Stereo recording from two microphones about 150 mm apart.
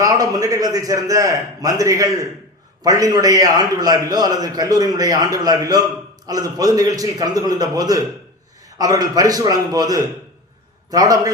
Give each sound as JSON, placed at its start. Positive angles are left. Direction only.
{"t": 0.0, "sound": "a man's voice", "side_deg": -25}